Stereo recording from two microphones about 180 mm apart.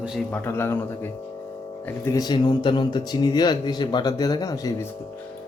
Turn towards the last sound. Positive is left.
turn(degrees=20)  # may be behind; listen again after turning